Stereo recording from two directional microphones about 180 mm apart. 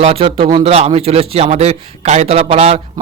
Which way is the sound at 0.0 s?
35° right (ahead or behind).